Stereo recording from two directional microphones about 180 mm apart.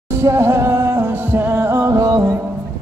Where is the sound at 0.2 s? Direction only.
15° right (ahead or behind).